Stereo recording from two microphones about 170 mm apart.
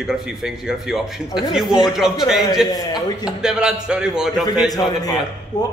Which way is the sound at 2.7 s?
25° left (ahead or behind).